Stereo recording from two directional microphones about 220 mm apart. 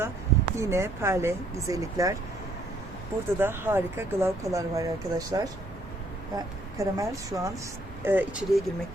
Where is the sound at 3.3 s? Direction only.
10° right (ahead or behind).